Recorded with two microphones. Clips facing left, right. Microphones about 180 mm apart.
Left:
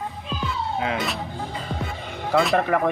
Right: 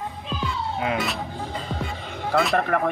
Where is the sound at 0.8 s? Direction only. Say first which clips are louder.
Right 2 dB; centre (ahead or behind).